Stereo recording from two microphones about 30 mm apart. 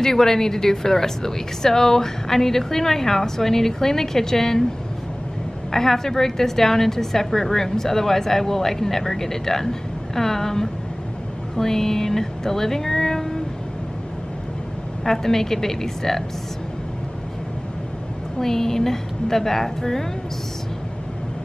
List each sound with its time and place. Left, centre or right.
0.0 s a woman's voice: centre
5.7 s a woman's voice: centre
11.5 s a sound: centre
15.0 s a woman's voice: centre
18.4 s a woman's voice: centre